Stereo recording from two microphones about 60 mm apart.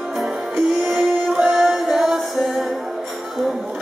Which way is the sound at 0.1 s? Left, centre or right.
Centre.